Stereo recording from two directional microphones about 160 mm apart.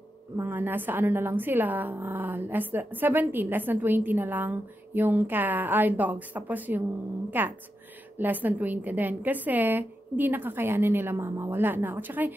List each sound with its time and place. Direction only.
0.4 s a woman's voice: 10° right (ahead or behind)